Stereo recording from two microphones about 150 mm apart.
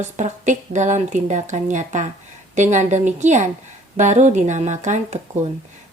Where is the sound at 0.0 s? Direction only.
55° right (ahead or behind).